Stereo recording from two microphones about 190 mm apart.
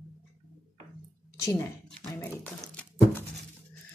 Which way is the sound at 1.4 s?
15° left (ahead or behind).